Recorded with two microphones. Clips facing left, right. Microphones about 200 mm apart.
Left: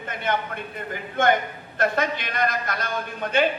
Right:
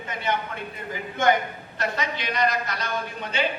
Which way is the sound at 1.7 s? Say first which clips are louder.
Left 5 dB; 50° left (ahead or behind).